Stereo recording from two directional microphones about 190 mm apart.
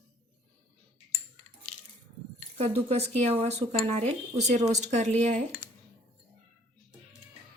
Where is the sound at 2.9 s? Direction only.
35° right (ahead or behind).